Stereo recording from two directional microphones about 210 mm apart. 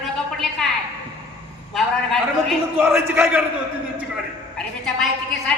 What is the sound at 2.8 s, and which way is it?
Speech, 10° right (ahead or behind).